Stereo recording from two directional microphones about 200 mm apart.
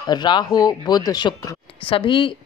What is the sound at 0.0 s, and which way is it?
A woman's voice, 20° left (ahead or behind).